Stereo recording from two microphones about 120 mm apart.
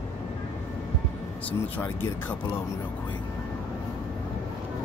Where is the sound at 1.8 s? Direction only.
15° left (ahead or behind).